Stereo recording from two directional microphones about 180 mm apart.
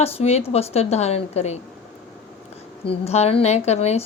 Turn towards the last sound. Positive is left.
turn(degrees=35)  # may be behind; listen again after turning